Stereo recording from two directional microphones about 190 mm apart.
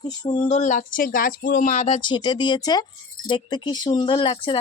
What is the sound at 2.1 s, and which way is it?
Speech, 25° left (ahead or behind).